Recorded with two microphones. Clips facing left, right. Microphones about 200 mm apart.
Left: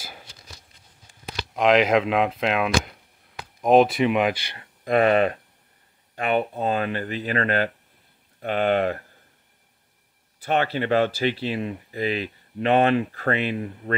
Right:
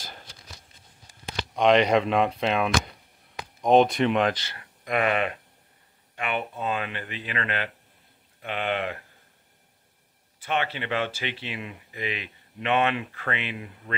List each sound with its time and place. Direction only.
0.0 s a sound: 10° left (ahead or behind)
1.5 s speech: centre (ahead or behind)
4.6 s speech: 35° left (ahead or behind)
10.4 s speech: 40° left (ahead or behind)